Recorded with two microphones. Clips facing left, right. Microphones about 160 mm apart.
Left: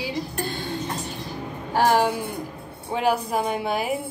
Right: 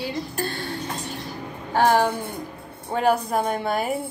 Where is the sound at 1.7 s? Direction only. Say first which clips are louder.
Right 1 dB; 10° left (ahead or behind).